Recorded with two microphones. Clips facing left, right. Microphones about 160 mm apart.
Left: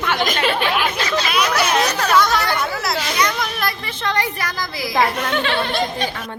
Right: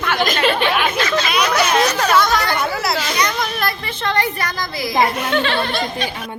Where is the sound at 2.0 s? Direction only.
10° right (ahead or behind).